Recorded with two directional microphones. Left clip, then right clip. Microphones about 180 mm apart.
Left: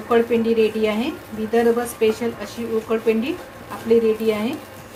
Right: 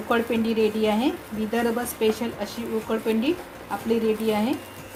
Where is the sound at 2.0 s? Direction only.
45° right (ahead or behind).